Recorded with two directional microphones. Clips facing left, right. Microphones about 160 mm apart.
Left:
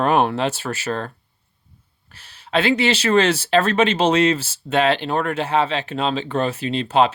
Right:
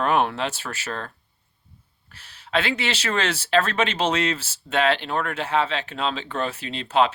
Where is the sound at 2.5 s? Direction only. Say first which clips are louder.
Left 7 dB; 30° left (ahead or behind).